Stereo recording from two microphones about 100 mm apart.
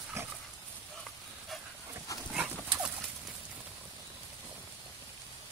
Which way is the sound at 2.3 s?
10° right (ahead or behind).